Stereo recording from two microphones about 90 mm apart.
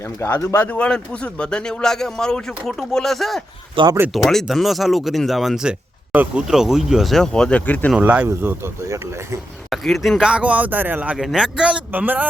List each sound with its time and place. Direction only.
0.0 s speech: 30° left (ahead or behind)
0.8 s speech: 10° left (ahead or behind)
3.8 s speech: 70° right (ahead or behind)
4.1 s speech: centre (ahead or behind); by 7.9 s 20° left (ahead or behind)
7.9 s speech: 15° right (ahead or behind)
8.3 s speech: 30° right (ahead or behind)
9.6 s speech: centre (ahead or behind); by 11.2 s 15° right (ahead or behind)
11.2 s speech: 5° right (ahead or behind)